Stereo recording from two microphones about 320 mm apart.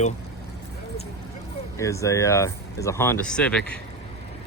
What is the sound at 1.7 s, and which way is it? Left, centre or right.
Speech, centre.